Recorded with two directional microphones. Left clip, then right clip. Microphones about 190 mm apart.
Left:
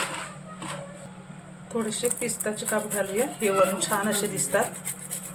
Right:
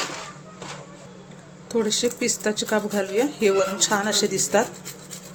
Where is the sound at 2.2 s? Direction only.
55° right (ahead or behind).